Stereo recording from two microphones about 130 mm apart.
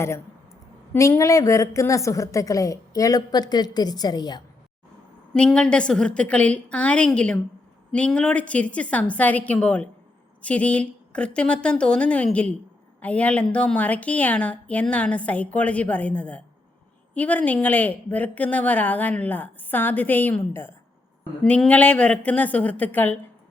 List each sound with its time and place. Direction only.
0.9 s a woman's voice: 25° left (ahead or behind)
5.3 s speech: 5° left (ahead or behind)